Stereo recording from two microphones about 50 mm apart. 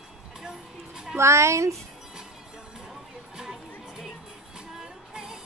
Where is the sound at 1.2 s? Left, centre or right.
Right.